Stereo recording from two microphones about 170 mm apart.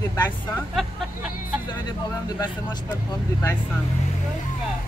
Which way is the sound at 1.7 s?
25° left (ahead or behind).